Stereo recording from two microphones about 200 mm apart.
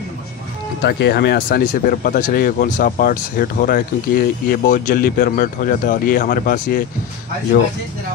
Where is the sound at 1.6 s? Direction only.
45° left (ahead or behind).